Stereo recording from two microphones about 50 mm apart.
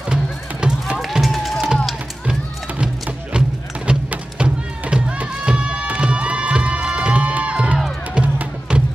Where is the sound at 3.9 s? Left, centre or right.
Centre.